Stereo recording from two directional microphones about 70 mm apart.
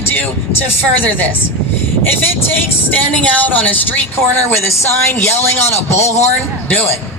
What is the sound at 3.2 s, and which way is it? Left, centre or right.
Speech, left.